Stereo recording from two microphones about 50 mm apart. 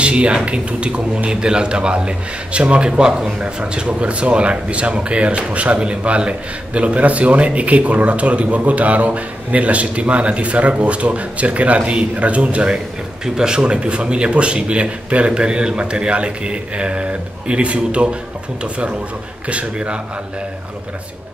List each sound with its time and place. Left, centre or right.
0.0 s a man's voice: right
12.7 s a man's voice: centre